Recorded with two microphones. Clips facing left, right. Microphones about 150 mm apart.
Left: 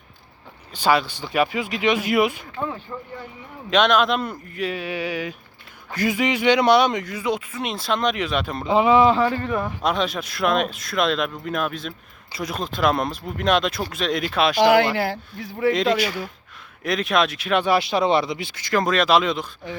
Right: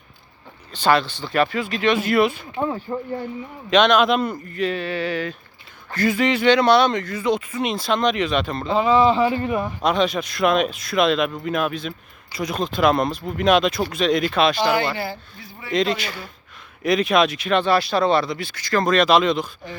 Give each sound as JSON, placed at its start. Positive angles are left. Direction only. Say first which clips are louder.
{"t": 0.7, "sound": "speech", "louder": "right 1 dB", "side_deg": 10}
{"t": 2.9, "sound": "speech", "louder": "right 7 dB", "side_deg": -35}
{"t": 3.7, "sound": "speech", "louder": "right 2 dB", "side_deg": 5}
{"t": 9.0, "sound": "speech", "louder": "even", "side_deg": 0}
{"t": 14.6, "sound": "speech", "louder": "left 4 dB", "side_deg": 90}
{"t": 15.7, "sound": "speech", "louder": "right 3 dB", "side_deg": 5}
{"t": 18.9, "sound": "speech", "louder": "right 3 dB", "side_deg": 5}